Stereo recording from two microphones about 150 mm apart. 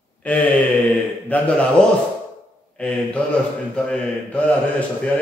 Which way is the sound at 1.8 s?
5° left (ahead or behind).